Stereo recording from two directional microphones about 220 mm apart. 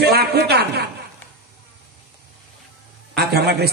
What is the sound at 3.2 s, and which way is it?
Speech, 45° right (ahead or behind).